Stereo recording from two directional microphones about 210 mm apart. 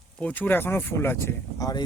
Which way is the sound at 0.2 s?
5° left (ahead or behind).